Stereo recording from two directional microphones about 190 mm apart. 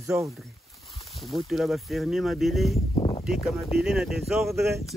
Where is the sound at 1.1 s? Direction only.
Centre (ahead or behind).